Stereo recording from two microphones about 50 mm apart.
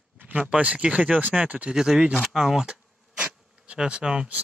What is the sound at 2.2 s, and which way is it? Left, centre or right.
Bee, centre.